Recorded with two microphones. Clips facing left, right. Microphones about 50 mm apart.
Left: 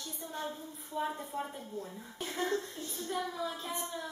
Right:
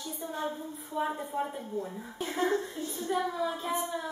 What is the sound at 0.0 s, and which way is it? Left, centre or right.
A woman's voice, centre.